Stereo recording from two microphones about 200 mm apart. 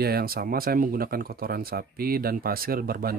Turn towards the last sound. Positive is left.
turn(degrees=-45)  # may be behind; listen again after turning